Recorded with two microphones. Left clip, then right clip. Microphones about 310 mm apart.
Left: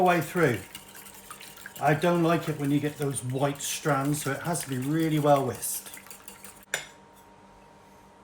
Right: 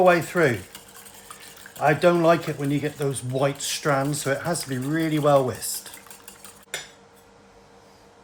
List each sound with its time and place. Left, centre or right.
0.0 s speech: right
1.8 s speech: right